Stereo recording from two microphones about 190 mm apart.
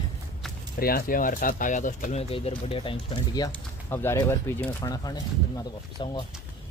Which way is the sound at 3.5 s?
10° left (ahead or behind).